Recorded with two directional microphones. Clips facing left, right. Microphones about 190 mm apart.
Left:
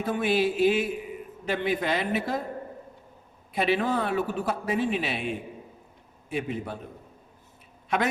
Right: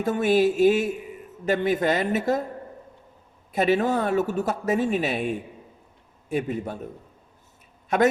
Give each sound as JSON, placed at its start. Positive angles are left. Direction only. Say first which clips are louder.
{"t": 0.0, "sound": "speech", "louder": "right 5 dB", "side_deg": -45}
{"t": 3.5, "sound": "speech", "louder": "right 4 dB", "side_deg": -45}
{"t": 7.9, "sound": "a man's voice", "louder": "right 6 dB", "side_deg": -45}